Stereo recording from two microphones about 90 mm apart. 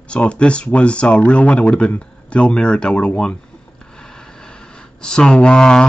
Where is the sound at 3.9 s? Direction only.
5° left (ahead or behind).